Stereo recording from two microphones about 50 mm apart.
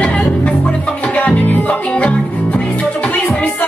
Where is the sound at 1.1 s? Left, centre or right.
Left.